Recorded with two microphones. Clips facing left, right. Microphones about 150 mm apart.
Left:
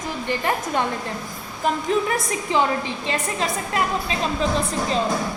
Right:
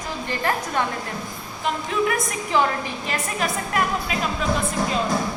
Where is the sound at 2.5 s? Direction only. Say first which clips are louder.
Even; 20° left (ahead or behind).